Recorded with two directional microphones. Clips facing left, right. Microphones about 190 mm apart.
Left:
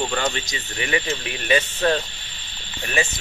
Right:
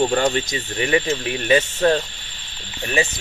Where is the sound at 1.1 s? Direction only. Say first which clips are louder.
Right 4 dB; 25° right (ahead or behind).